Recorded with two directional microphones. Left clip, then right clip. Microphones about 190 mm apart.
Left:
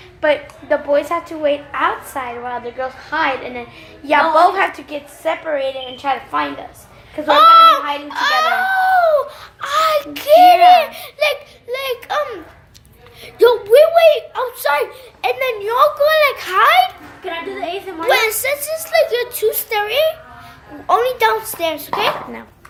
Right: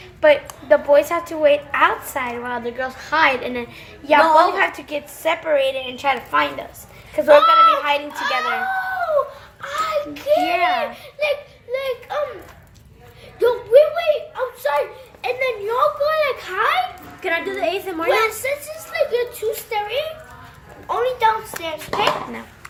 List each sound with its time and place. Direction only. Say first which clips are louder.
0.2 s a woman's voice: right 2 dB; centre (ahead or behind)
4.0 s a woman's voice: left 1 dB; 10° left (ahead or behind)
7.3 s a child's voice: left 6 dB; 50° left (ahead or behind)
9.6 s a sound: left 7 dB; 60° left (ahead or behind)
10.7 s a child's voice: left 11 dB; 60° left (ahead or behind)
13.4 s a child's voice: left 4 dB; 55° left (ahead or behind)
17.2 s a woman's voice: right 3 dB; 40° right (ahead or behind)
18.1 s a child's voice: left 4 dB; 55° left (ahead or behind)